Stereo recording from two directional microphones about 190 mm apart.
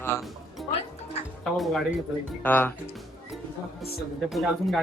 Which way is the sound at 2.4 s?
10° left (ahead or behind).